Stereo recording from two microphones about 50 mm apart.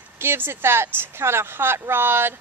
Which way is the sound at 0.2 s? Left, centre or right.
Right.